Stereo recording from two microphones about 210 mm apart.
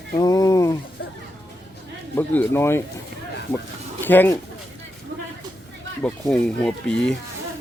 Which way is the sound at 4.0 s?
10° left (ahead or behind).